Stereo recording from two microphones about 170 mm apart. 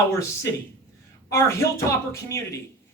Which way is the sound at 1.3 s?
15° left (ahead or behind).